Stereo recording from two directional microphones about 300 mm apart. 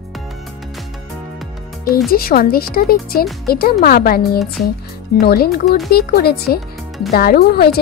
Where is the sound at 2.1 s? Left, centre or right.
Left.